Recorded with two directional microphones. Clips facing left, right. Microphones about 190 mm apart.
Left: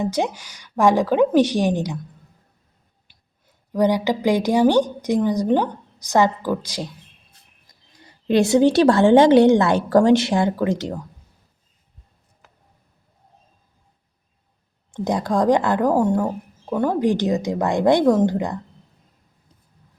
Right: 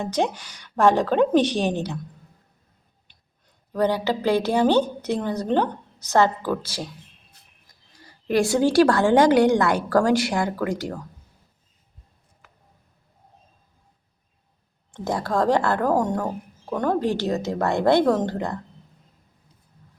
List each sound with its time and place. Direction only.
0.0 s a woman's voice: 10° left (ahead or behind)
3.7 s a woman's voice: 15° left (ahead or behind)
8.0 s a woman's voice: 20° left (ahead or behind)
14.9 s a woman's voice: 15° left (ahead or behind)